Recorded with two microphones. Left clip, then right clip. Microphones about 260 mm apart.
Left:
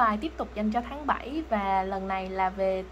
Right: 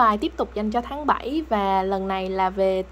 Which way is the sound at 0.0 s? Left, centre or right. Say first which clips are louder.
Right 6 dB; right.